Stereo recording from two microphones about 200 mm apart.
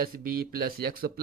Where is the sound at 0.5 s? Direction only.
50° right (ahead or behind).